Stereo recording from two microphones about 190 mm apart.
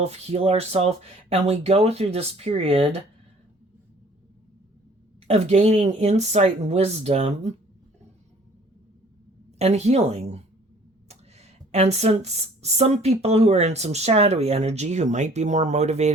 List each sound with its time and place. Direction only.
0.0 s speech: 35° right (ahead or behind)
5.3 s speech: 35° right (ahead or behind)
9.6 s speech: 35° right (ahead or behind)